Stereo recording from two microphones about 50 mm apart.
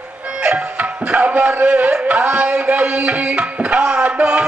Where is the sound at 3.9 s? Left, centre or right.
Right.